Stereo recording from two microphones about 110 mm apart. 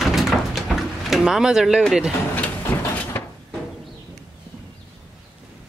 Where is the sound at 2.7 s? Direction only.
20° left (ahead or behind).